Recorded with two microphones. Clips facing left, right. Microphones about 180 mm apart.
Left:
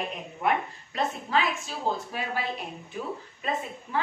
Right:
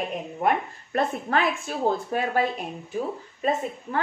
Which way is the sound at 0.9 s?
55° right (ahead or behind).